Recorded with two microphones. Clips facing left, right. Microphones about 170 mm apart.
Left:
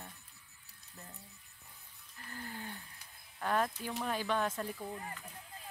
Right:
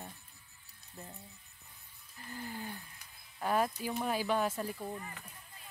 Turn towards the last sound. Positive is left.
turn(degrees=-5)  # may be behind; listen again after turning